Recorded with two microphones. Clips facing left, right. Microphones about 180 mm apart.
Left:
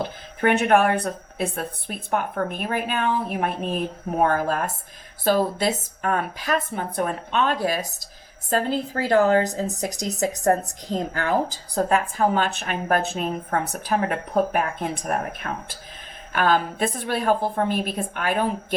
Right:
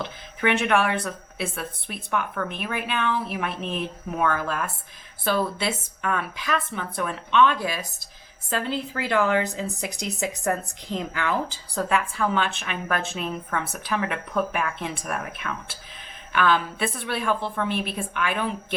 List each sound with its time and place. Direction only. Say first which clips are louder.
0.0 s speech: left 3 dB; 35° left (ahead or behind)